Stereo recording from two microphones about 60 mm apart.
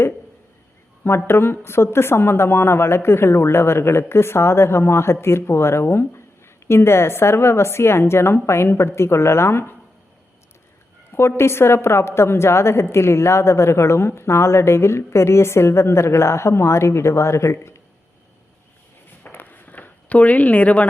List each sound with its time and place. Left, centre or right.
1.0 s a woman's voice: left
11.1 s a woman's voice: left
19.2 s a sound: left